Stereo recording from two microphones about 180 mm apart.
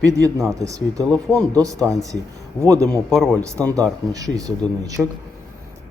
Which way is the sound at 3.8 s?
20° right (ahead or behind).